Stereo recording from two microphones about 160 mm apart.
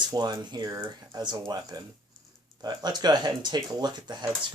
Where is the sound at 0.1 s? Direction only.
25° right (ahead or behind).